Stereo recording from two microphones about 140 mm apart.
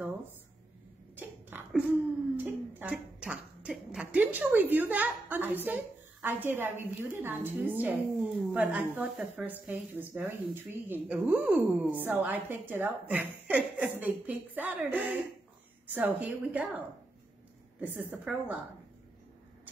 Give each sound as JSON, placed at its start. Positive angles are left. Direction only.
{"t": 1.1, "sound": "a sound", "side_deg": -15}
{"t": 2.7, "sound": "a woman's voice", "side_deg": -10}
{"t": 9.7, "sound": "speech", "side_deg": -15}
{"t": 17.7, "sound": "speech", "side_deg": -10}